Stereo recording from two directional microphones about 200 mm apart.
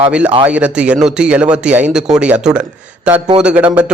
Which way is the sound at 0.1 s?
5° right (ahead or behind).